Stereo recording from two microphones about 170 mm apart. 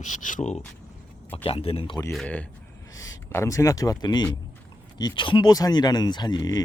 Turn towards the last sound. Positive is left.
turn(degrees=25)  # may be behind; listen again after turning